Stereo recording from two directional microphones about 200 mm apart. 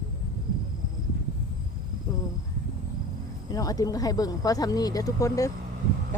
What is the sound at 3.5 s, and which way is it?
Speech, 20° left (ahead or behind).